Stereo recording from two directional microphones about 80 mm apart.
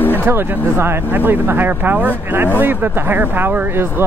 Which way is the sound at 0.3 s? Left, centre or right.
Right.